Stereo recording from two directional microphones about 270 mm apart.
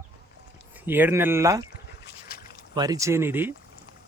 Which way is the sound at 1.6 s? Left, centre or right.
Left.